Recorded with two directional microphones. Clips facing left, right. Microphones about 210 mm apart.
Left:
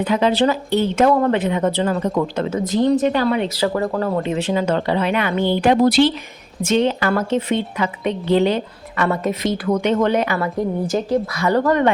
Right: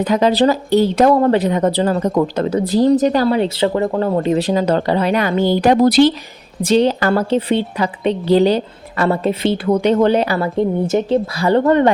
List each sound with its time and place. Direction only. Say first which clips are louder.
0.0 s a woman's voice: right 3 dB; 40° right (ahead or behind)